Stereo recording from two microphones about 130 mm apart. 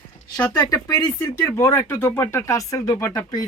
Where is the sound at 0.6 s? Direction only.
30° left (ahead or behind).